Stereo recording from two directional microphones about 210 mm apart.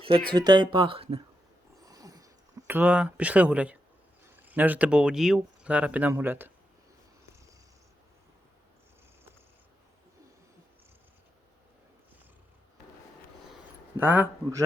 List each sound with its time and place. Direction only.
0.3 s speech: 20° right (ahead or behind)
1.8 s a sound: 15° right (ahead or behind)
4.2 s speech: 10° right (ahead or behind)
14.0 s a man's voice: 10° right (ahead or behind)